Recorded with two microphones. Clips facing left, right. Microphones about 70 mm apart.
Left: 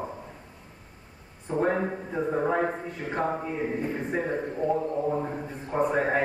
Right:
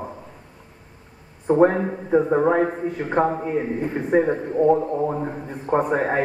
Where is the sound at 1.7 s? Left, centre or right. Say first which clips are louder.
Right 7 dB; right.